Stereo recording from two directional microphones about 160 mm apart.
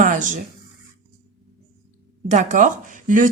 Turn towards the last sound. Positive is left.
turn(degrees=-55)  # may be behind; listen again after turning